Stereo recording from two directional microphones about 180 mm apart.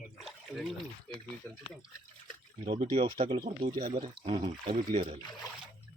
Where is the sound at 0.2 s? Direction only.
Centre (ahead or behind).